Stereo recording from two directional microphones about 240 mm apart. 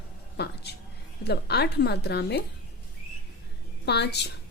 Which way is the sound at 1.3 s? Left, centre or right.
Left.